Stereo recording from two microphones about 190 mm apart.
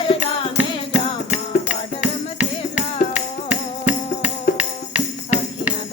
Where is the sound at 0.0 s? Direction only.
35° left (ahead or behind).